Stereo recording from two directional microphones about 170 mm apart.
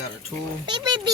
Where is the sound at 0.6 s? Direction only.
25° right (ahead or behind).